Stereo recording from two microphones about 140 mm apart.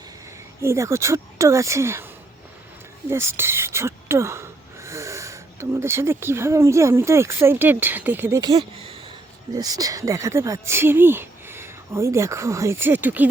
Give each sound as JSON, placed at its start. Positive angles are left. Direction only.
{"t": 0.6, "sound": "speech", "side_deg": -20}
{"t": 3.1, "sound": "speech", "side_deg": -20}
{"t": 8.5, "sound": "speech", "side_deg": -40}
{"t": 9.5, "sound": "speech", "side_deg": -25}